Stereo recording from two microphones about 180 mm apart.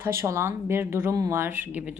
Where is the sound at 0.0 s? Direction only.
15° right (ahead or behind).